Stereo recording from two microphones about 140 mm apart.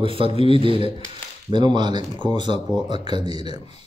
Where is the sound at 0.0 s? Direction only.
40° right (ahead or behind).